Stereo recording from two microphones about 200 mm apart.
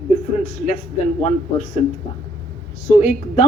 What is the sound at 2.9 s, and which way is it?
Speech, 35° left (ahead or behind).